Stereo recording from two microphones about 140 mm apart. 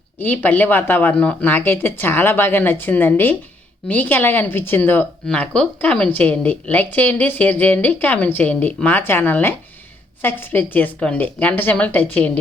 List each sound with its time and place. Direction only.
0.2 s speech: 15° left (ahead or behind)